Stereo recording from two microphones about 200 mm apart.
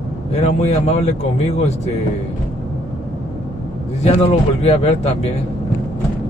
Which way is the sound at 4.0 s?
30° left (ahead or behind).